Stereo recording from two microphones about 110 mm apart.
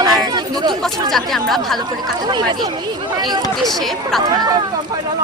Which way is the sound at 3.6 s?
Centre (ahead or behind).